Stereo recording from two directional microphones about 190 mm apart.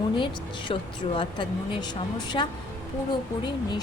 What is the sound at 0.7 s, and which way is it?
A woman's voice, 25° left (ahead or behind).